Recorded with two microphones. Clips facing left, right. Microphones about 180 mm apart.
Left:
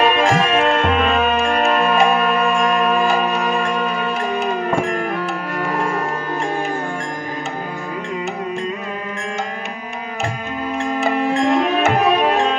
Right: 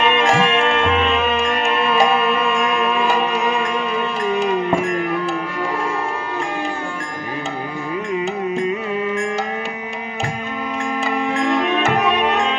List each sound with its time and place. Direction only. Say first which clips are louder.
0.0 s music: left 1 dB; 40° left (ahead or behind)
11.3 s music: left 1 dB; 35° left (ahead or behind)